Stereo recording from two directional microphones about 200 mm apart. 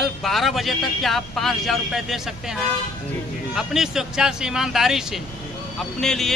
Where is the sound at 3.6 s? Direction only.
Centre (ahead or behind).